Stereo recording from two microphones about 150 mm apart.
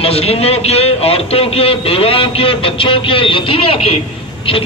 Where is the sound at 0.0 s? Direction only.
40° left (ahead or behind).